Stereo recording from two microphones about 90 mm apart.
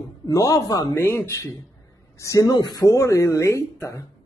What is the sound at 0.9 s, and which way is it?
Speech, 25° left (ahead or behind).